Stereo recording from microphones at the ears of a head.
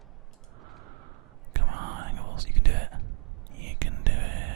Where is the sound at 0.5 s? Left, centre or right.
Right.